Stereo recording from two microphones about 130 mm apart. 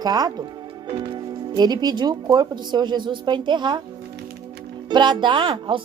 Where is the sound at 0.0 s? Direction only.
30° right (ahead or behind).